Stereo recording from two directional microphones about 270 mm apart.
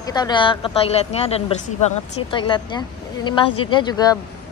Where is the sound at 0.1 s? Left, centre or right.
Centre.